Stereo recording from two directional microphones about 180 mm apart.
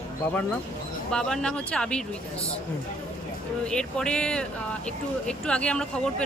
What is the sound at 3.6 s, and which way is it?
Speech, 5° left (ahead or behind).